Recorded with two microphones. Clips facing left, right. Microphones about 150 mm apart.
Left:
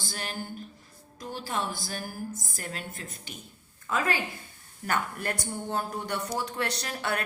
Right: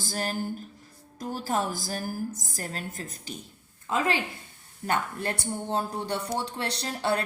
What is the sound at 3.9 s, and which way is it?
Speech, 25° right (ahead or behind).